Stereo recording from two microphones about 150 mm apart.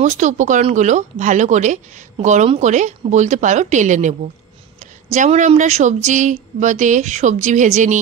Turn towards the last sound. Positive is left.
turn(degrees=-55)  # may be behind; listen again after turning